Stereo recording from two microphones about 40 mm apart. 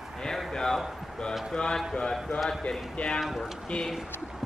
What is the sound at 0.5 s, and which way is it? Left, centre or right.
A man's voice, centre.